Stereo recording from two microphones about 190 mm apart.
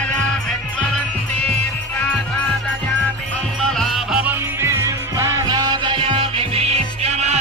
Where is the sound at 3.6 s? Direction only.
Centre (ahead or behind).